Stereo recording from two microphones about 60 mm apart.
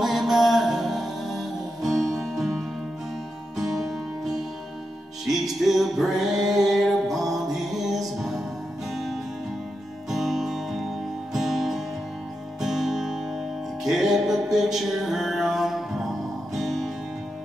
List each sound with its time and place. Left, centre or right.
0.0 s music: centre